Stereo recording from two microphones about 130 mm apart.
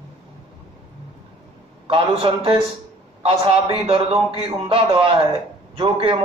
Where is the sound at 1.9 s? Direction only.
45° right (ahead or behind).